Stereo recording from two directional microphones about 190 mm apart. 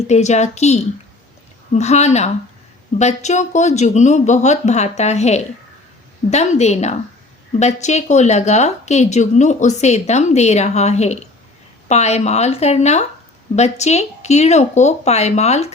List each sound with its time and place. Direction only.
0.1 s a woman's voice: 35° left (ahead or behind)